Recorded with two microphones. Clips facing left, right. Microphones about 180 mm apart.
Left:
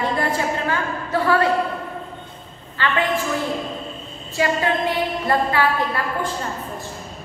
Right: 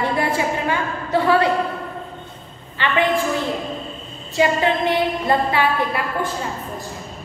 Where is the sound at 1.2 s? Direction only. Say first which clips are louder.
Right 1 dB; 20° right (ahead or behind).